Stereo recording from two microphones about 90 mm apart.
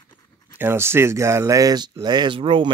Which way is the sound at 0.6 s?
25° right (ahead or behind).